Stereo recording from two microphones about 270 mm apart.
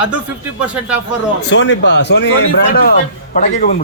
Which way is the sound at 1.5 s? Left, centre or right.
Left.